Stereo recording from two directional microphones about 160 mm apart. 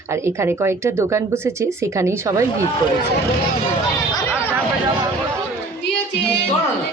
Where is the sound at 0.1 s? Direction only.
15° right (ahead or behind).